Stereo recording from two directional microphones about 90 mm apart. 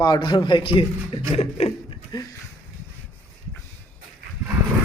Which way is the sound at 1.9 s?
50° left (ahead or behind).